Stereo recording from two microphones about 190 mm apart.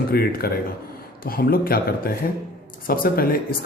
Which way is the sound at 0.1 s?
55° left (ahead or behind).